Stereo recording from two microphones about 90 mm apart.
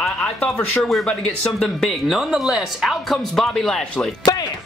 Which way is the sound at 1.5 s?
5° left (ahead or behind).